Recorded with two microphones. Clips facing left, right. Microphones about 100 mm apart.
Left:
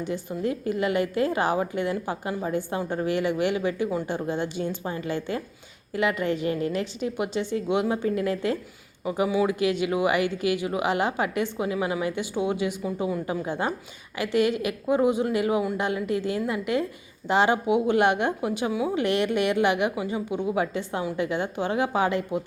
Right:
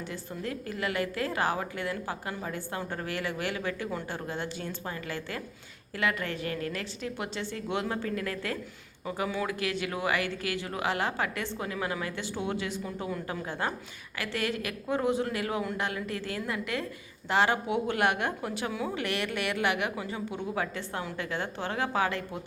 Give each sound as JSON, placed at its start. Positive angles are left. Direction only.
{"t": 0.0, "sound": "a woman's voice", "side_deg": 20}